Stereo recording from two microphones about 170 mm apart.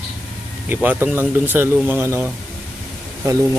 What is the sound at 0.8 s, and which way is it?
Speech, 10° right (ahead or behind).